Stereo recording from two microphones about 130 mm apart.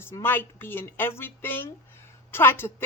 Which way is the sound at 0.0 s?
15° left (ahead or behind).